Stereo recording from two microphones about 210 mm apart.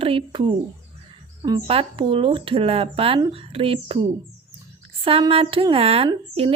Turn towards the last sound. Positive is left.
turn(degrees=-25)  # may be behind; listen again after turning